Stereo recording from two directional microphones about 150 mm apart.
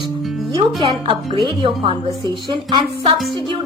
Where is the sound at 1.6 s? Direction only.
35° right (ahead or behind).